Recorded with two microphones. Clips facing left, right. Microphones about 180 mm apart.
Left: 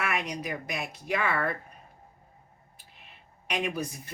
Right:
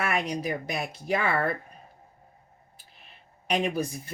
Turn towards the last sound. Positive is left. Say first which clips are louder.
# right 4 dB
turn(degrees=-30)  # may be behind; listen again after turning